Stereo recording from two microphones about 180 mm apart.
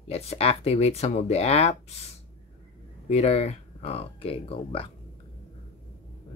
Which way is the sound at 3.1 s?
35° left (ahead or behind).